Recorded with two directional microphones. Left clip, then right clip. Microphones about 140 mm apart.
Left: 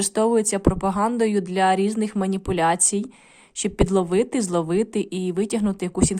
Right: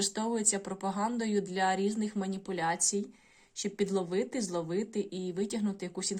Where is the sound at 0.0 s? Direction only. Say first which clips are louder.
Left 12 dB; 50° left (ahead or behind).